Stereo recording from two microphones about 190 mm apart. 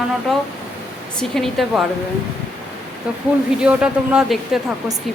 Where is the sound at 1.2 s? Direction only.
Centre (ahead or behind).